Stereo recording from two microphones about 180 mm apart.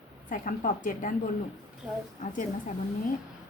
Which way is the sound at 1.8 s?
5° right (ahead or behind).